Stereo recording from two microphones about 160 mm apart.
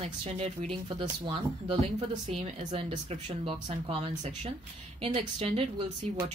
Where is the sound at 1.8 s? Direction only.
45° right (ahead or behind).